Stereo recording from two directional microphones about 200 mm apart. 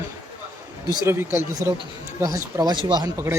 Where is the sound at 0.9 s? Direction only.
10° right (ahead or behind).